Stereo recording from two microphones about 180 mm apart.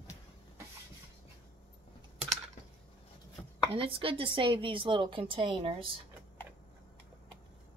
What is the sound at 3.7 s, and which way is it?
A woman's voice, 30° right (ahead or behind).